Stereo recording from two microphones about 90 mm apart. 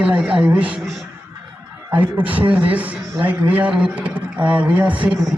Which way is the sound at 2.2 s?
75° right (ahead or behind).